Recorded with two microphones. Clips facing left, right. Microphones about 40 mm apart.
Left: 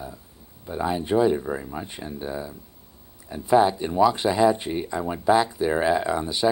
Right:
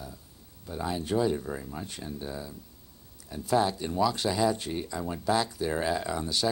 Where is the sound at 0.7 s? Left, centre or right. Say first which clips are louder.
Left 6 dB; left.